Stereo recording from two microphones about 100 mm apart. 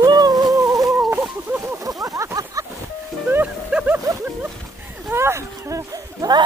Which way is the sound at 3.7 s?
10° right (ahead or behind).